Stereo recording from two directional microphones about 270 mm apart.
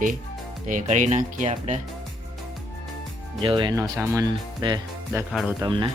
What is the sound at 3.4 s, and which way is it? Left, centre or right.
Speech, centre.